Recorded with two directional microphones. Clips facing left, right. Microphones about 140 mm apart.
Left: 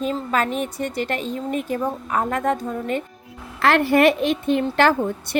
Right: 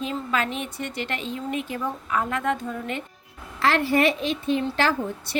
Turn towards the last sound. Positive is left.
turn(degrees=55)  # may be behind; listen again after turning